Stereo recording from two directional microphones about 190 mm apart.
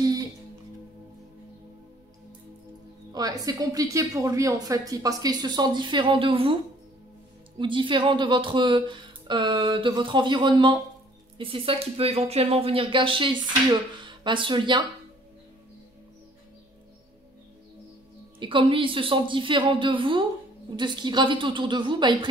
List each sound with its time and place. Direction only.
0.0 s music: 20° right (ahead or behind)
3.1 s speech: 20° right (ahead or behind)
18.4 s speech: 25° right (ahead or behind)